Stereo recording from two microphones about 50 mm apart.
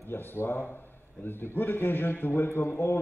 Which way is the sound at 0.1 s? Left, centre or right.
Left.